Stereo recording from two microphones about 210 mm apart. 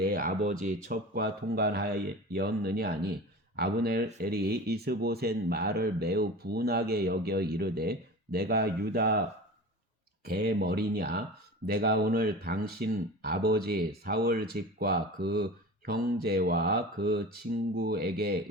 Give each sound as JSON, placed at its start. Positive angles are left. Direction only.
{"t": 0.0, "sound": "speech", "side_deg": -45}
{"t": 10.2, "sound": "speech", "side_deg": -50}